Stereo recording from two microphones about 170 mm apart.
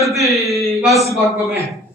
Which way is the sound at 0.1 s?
Centre (ahead or behind).